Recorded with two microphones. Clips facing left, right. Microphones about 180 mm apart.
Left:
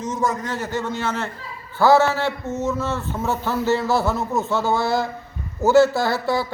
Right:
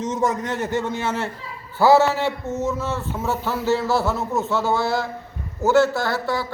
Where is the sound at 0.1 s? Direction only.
20° right (ahead or behind); by 2.0 s 5° right (ahead or behind).